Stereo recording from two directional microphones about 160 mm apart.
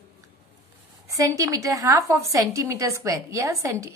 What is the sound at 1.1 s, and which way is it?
A woman's voice, 20° right (ahead or behind).